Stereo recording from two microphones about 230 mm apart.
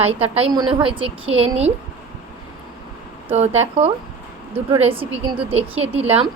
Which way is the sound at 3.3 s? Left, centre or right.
Right.